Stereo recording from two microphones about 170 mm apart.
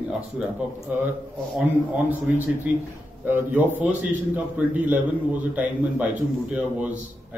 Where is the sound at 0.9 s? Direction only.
10° right (ahead or behind).